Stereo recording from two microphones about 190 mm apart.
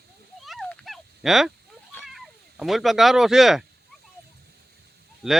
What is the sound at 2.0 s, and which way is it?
Speech, centre (ahead or behind).